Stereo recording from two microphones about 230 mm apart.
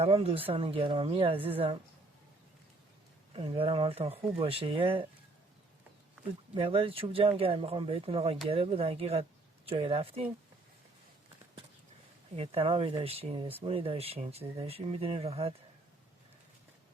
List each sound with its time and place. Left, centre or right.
0.0 s speech: right
3.3 s speech: right
6.5 s speech: right
12.4 s speech: right